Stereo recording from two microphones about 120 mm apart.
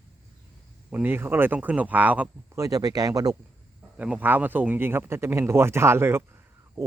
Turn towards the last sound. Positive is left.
turn(degrees=-20)  # may be behind; listen again after turning